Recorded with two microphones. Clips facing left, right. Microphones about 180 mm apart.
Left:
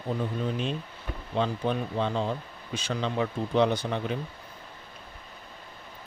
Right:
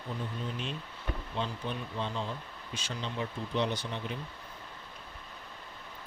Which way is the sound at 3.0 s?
90° left.